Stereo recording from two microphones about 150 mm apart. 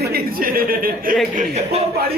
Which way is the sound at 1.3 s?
45° right (ahead or behind).